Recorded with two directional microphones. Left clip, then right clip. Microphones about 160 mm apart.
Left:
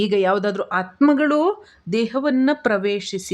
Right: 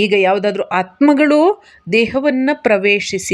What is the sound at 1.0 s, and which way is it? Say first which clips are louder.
Speech: right 6 dB; 15° right (ahead or behind).